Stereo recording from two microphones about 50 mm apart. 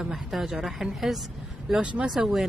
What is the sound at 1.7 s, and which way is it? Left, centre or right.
Speech, centre.